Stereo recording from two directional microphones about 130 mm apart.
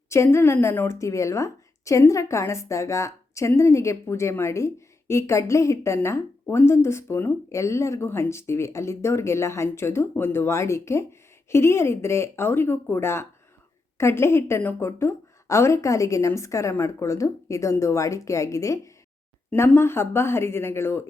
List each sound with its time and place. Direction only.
0.1 s a woman's voice: 20° left (ahead or behind)